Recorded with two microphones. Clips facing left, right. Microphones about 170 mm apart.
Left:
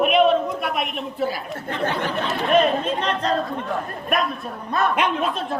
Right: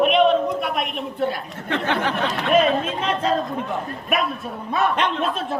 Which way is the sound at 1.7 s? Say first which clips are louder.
Right 2 dB; 75° right (ahead or behind).